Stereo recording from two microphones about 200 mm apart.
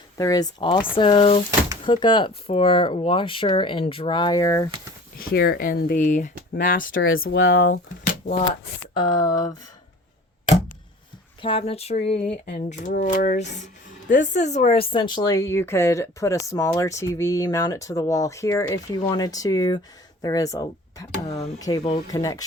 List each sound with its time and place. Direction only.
0.2 s speech: 20° left (ahead or behind)
5.1 s speech: 50° left (ahead or behind)
6.9 s speech: 85° left
9.0 s speech: 20° left (ahead or behind)
11.4 s a sound: 30° left (ahead or behind)
12.5 s speech: 40° left (ahead or behind); by 22.4 s 20° left (ahead or behind)